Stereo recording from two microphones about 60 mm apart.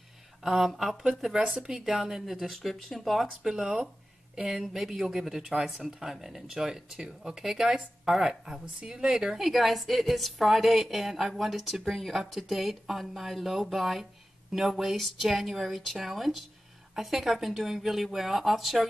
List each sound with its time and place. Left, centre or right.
0.4 s speech: centre